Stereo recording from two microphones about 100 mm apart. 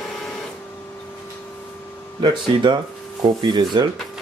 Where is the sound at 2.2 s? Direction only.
50° right (ahead or behind).